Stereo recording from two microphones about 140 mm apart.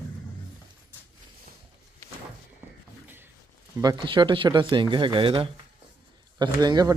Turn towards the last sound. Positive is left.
turn(degrees=-30)  # may be behind; listen again after turning